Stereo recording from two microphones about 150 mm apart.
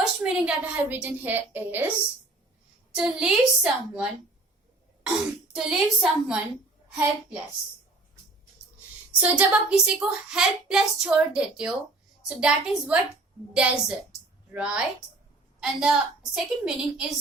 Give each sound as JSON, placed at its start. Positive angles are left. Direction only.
{"t": 0.0, "sound": "a sound", "side_deg": -5}
{"t": 1.0, "sound": "a woman's voice", "side_deg": -15}
{"t": 2.9, "sound": "speech", "side_deg": -5}
{"t": 5.5, "sound": "speech", "side_deg": -5}
{"t": 9.2, "sound": "a woman's voice", "side_deg": -10}